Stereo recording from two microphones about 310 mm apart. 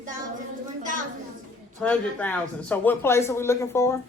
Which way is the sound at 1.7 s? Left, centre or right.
Centre.